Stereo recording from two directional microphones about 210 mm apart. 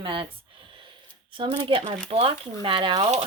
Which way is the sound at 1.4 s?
25° right (ahead or behind).